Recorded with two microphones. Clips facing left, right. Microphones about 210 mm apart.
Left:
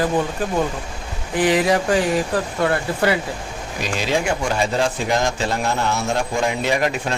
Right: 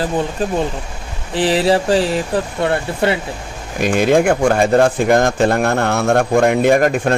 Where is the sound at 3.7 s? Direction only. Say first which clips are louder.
Right 9 dB; 55° right (ahead or behind).